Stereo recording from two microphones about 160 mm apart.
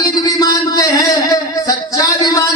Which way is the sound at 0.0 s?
20° left (ahead or behind).